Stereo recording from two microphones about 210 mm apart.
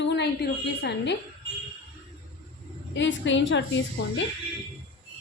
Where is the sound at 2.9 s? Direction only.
60° left (ahead or behind).